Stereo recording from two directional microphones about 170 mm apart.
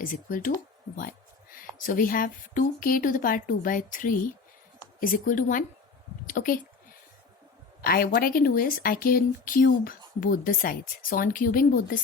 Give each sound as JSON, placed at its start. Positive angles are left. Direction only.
{"t": 0.0, "sound": "a woman's voice", "side_deg": 55}
{"t": 0.9, "sound": "a sound", "side_deg": 55}
{"t": 1.9, "sound": "a woman's voice", "side_deg": 55}
{"t": 7.9, "sound": "speech", "side_deg": 60}